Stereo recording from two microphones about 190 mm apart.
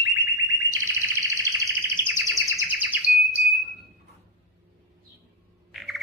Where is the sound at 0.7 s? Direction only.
15° right (ahead or behind).